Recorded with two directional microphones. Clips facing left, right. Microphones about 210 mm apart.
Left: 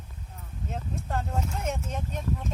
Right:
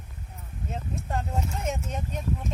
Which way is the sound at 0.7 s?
5° right (ahead or behind).